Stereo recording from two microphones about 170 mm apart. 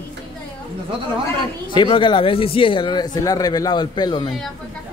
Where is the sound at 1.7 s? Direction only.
30° left (ahead or behind).